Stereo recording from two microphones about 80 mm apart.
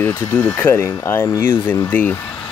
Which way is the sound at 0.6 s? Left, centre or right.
Left.